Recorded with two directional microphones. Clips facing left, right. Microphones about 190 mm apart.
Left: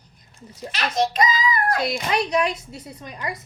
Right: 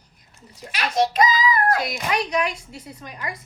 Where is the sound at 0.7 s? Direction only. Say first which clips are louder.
Right 1 dB; 10° right (ahead or behind).